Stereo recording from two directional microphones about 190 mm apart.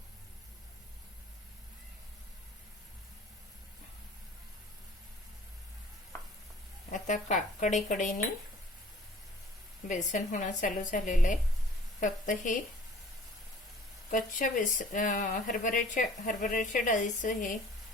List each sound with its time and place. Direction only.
6.9 s a woman's voice: 40° left (ahead or behind)
9.9 s a woman's voice: 40° left (ahead or behind)
14.1 s speech: 45° left (ahead or behind)